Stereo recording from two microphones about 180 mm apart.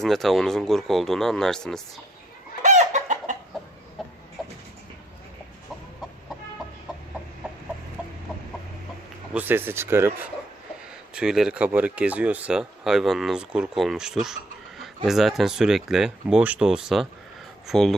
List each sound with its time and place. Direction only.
0.0 s speech: centre (ahead or behind)
2.6 s chicken: 40° right (ahead or behind)
9.3 s speech: 10° right (ahead or behind)